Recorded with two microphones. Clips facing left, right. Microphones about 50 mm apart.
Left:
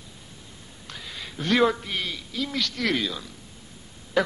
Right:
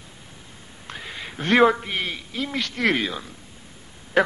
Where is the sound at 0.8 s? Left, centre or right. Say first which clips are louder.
Right 4 dB; right.